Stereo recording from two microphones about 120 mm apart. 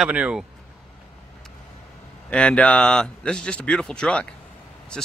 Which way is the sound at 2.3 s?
10° left (ahead or behind).